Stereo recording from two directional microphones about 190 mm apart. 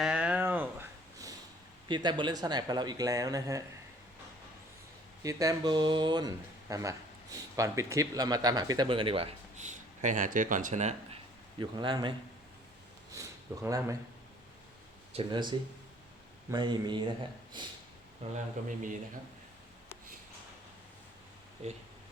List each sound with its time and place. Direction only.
0.0 s a sound: 5° right (ahead or behind)
1.9 s speech: 25° right (ahead or behind)
5.2 s speech: 20° right (ahead or behind); by 11.2 s 35° right (ahead or behind)
11.6 s speech: 25° right (ahead or behind)
13.1 s a sound: 15° right (ahead or behind)
15.1 s speech: 25° right (ahead or behind)
18.2 s speech: 35° right (ahead or behind)